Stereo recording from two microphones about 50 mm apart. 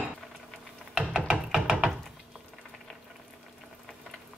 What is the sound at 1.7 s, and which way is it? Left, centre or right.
Wood, centre.